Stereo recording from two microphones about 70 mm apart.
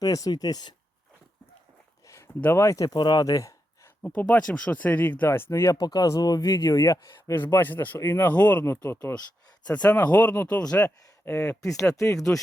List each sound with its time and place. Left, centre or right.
0.0 s speech: left
2.0 s a sound: left
2.4 s speech: left
2.6 s speech: left
4.2 s speech: centre
5.5 s speech: left
5.8 s speech: left
7.3 s speech: left
9.7 s speech: centre
11.3 s speech: left